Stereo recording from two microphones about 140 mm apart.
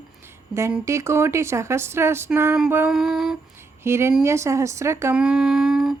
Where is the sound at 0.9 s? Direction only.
20° right (ahead or behind).